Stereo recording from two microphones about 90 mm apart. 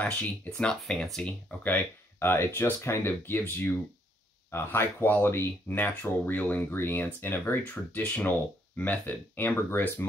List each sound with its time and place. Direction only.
0.0 s speech: 10° left (ahead or behind)
1.6 s speech: 20° left (ahead or behind)